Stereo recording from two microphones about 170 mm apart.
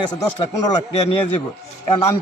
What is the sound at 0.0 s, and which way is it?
Speech, 25° left (ahead or behind).